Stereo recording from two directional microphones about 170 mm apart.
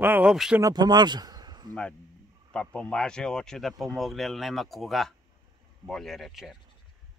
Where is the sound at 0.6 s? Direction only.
20° right (ahead or behind).